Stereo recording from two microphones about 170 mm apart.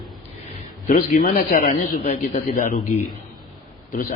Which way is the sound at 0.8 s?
55° left (ahead or behind).